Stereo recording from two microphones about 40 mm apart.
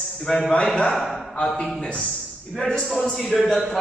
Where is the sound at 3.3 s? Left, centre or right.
Centre.